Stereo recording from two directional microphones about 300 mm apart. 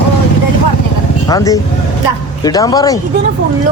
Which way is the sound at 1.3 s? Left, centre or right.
Centre.